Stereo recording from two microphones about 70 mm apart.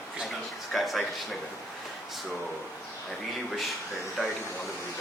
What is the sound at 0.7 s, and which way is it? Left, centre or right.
Speech, centre.